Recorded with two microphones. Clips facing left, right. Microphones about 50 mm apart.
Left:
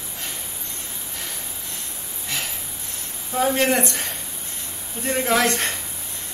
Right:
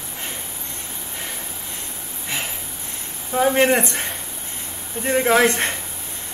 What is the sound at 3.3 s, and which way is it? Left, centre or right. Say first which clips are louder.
Speech: right 3 dB; right.